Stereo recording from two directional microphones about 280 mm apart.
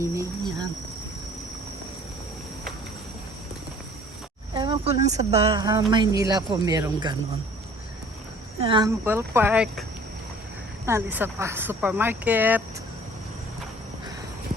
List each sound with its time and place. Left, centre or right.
0.0 s insect: centre
4.5 s speech: centre
8.6 s speech: centre
10.8 s speech: centre